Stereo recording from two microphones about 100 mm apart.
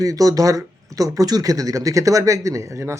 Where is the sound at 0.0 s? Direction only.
35° right (ahead or behind).